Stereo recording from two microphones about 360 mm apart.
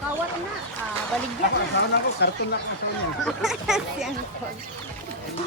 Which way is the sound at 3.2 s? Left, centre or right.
Centre.